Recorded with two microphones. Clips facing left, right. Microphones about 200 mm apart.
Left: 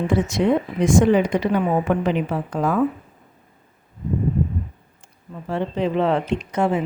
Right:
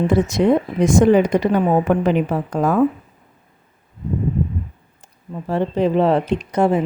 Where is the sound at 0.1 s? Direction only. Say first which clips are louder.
Right 2 dB; 40° right (ahead or behind).